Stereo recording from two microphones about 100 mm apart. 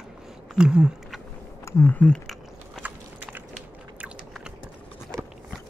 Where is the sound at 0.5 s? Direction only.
10° right (ahead or behind).